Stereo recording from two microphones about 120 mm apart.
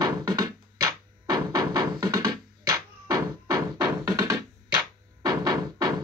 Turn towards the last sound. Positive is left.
turn(degrees=-30)  # may be behind; listen again after turning